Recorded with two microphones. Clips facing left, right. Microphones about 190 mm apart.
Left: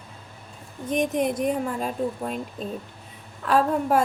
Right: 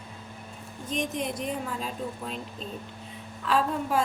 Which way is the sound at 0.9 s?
55° left (ahead or behind).